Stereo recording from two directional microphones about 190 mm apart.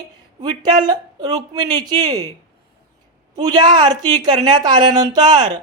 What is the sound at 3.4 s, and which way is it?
A woman's voice, 20° right (ahead or behind).